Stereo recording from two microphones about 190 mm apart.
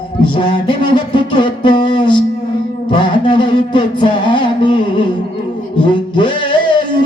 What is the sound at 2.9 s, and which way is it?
Music, 25° left (ahead or behind).